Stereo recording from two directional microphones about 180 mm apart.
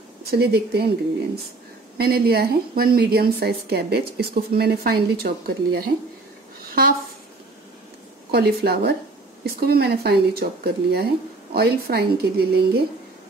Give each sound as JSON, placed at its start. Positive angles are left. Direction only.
{"t": 0.3, "sound": "a woman's voice", "side_deg": -60}
{"t": 8.3, "sound": "a woman's voice", "side_deg": -60}